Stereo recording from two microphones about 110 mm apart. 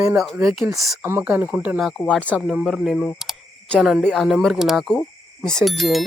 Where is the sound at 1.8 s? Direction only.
5° left (ahead or behind).